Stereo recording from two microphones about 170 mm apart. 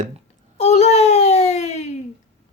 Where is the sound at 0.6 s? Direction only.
40° left (ahead or behind).